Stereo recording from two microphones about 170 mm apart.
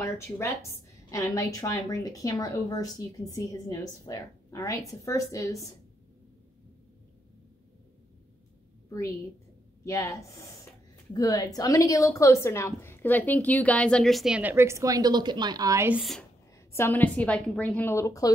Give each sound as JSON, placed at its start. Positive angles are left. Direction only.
{"t": 0.0, "sound": "a woman's voice", "side_deg": 15}
{"t": 9.8, "sound": "a woman's voice", "side_deg": 20}
{"t": 16.0, "sound": "speech", "side_deg": 0}
{"t": 16.7, "sound": "a woman's voice", "side_deg": 10}